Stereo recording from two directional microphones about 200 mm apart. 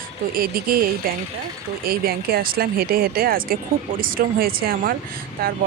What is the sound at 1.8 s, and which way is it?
A woman's voice, 50° right (ahead or behind).